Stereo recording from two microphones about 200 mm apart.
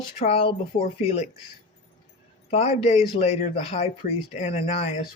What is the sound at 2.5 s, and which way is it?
Speech, 30° left (ahead or behind).